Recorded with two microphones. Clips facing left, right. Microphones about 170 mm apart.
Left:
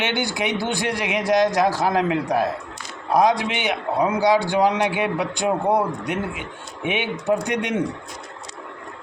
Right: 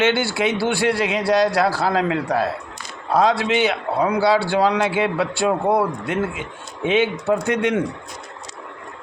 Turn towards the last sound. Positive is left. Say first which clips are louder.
# right 3 dB
turn(degrees=20)  # may be behind; listen again after turning